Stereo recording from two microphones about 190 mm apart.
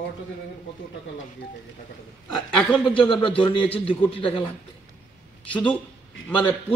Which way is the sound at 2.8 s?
25° left (ahead or behind).